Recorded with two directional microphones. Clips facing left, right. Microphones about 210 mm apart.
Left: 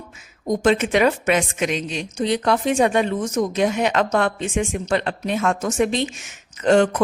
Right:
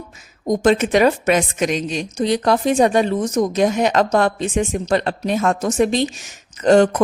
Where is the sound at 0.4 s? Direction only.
40° right (ahead or behind).